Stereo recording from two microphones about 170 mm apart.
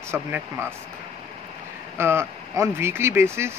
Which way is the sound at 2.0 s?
15° right (ahead or behind).